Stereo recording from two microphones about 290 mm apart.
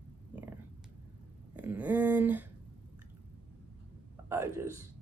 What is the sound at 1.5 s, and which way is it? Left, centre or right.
Speech, centre.